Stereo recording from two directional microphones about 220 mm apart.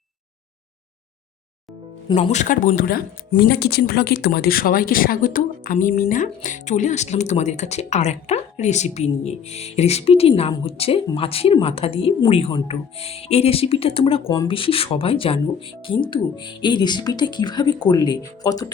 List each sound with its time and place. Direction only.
2.1 s speech: 30° left (ahead or behind); by 18.7 s 15° left (ahead or behind)